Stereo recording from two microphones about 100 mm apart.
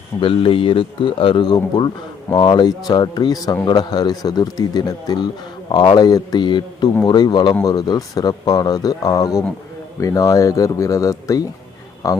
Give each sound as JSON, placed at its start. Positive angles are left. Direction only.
{"t": 0.2, "sound": "a man's voice", "side_deg": 60}